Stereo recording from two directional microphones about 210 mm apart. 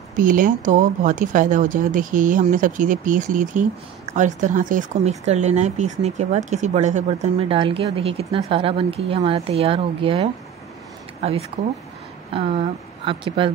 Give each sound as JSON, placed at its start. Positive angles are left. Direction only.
{"t": 0.2, "sound": "speech", "side_deg": -40}